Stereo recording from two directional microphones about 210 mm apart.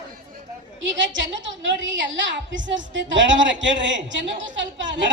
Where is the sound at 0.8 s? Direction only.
65° right (ahead or behind).